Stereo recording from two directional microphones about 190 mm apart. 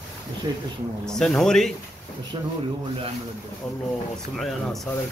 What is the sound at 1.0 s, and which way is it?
Speech, centre (ahead or behind).